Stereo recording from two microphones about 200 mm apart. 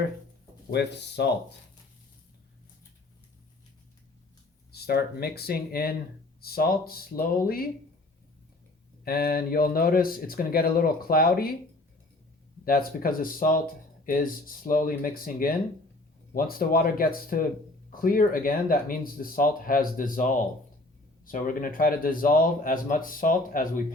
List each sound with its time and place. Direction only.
0.7 s speech: 55° left (ahead or behind)
4.7 s speech: 50° left (ahead or behind)
9.0 s speech: 50° left (ahead or behind)
12.6 s speech: 45° left (ahead or behind)